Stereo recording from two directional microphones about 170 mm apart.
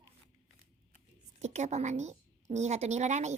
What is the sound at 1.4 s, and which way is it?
A woman's voice, 40° right (ahead or behind).